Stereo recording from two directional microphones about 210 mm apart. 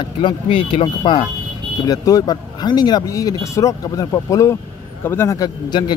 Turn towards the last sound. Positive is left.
turn(degrees=20)  # may be behind; listen again after turning